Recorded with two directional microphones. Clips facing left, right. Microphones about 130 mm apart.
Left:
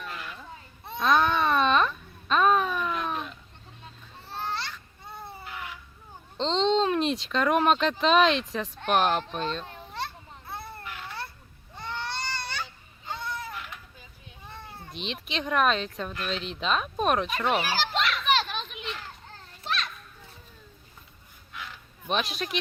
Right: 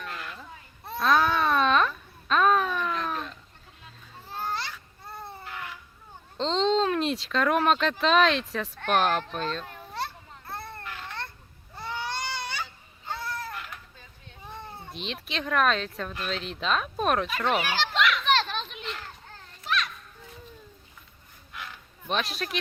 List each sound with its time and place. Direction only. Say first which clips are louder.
0.0 s a sound: even; centre (ahead or behind)
0.9 s babbling: even; centre (ahead or behind)
4.3 s baby cry: right 1 dB; 5° right (ahead or behind)
6.3 s babbling: even; 5° right (ahead or behind)
6.8 s speech: left 1 dB; centre (ahead or behind)
8.8 s speech: even; 10° left (ahead or behind)
9.9 s babbling: right 2 dB; centre (ahead or behind)
11.8 s baby cry: right 1 dB; 10° right (ahead or behind)
14.4 s cat: right 3 dB; 15° right (ahead or behind)
14.9 s speech: left 1 dB; centre (ahead or behind)
17.9 s children playing: right 5 dB; 35° left (ahead or behind)
18.2 s children playing: right 1 dB; 5° left (ahead or behind)
19.6 s children playing: right 2 dB; 30° left (ahead or behind)
21.5 s a sound: even; centre (ahead or behind)